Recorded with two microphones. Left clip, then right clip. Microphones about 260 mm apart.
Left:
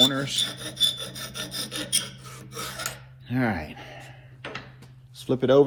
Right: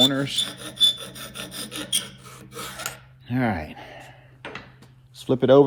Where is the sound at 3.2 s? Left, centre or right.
Right.